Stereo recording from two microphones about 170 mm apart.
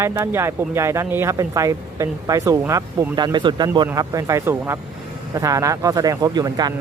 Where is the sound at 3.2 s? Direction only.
25° right (ahead or behind).